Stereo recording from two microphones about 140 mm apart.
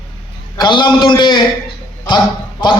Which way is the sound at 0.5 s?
30° left (ahead or behind).